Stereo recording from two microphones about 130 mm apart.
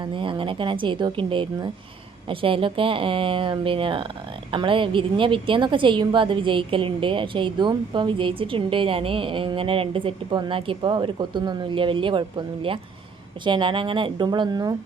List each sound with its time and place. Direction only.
0.0 s a woman's voice: 40° right (ahead or behind)
13.4 s a woman's voice: 40° right (ahead or behind)